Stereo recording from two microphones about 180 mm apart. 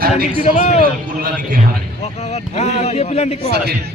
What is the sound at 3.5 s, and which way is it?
Speech, 60° right (ahead or behind).